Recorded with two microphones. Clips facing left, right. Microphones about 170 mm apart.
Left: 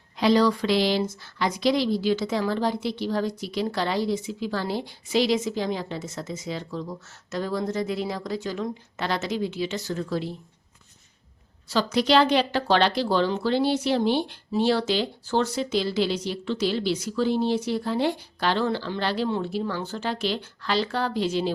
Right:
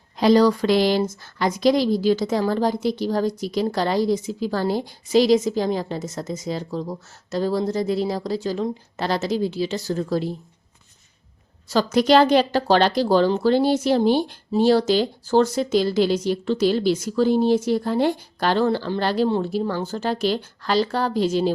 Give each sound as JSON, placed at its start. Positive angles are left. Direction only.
{"t": 0.2, "sound": "a woman's voice", "side_deg": -40}
{"t": 11.7, "sound": "speech", "side_deg": -45}